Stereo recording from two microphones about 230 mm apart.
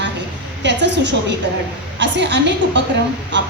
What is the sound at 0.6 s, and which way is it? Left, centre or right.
A woman's voice, right.